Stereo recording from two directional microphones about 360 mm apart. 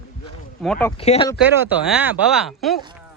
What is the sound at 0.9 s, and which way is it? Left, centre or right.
Speech, centre.